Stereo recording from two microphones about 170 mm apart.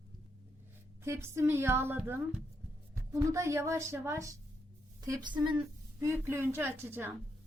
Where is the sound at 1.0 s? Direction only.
15° right (ahead or behind).